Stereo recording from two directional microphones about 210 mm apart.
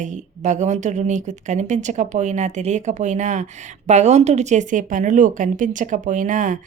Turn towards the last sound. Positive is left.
turn(degrees=-35)  # may be behind; listen again after turning